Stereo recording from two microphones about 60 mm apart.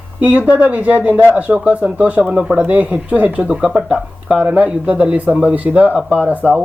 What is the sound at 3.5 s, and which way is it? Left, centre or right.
Speech, centre.